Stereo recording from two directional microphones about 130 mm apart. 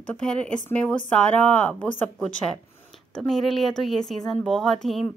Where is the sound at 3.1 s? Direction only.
5° left (ahead or behind).